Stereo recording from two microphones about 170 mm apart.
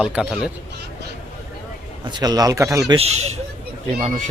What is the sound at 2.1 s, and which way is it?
Speech, 25° right (ahead or behind).